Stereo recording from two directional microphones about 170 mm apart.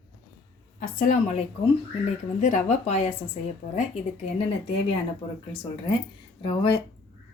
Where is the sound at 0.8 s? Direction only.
50° left (ahead or behind).